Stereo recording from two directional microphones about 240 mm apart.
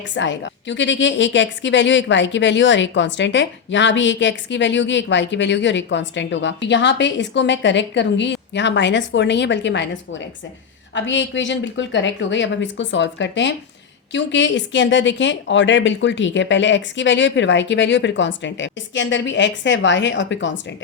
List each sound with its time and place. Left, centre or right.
0.1 s a woman's voice: left